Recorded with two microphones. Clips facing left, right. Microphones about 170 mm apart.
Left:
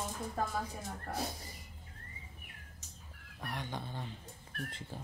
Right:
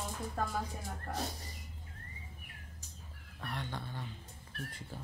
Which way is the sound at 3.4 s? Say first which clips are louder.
Left 1 dB; 15° left (ahead or behind).